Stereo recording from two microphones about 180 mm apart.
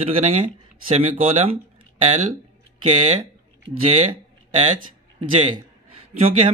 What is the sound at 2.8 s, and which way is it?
Speech, 35° right (ahead or behind).